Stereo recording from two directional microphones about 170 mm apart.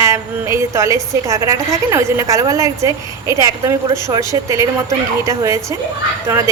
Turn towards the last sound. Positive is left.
turn(degrees=-20)  # may be behind; listen again after turning